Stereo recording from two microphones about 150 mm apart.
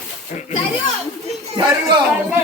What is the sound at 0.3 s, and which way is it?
Speech, 55° left (ahead or behind).